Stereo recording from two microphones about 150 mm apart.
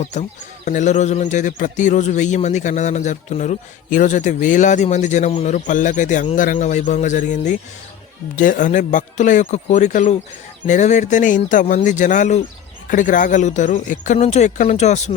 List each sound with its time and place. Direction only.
0.1 s a man's voice: 55° left (ahead or behind)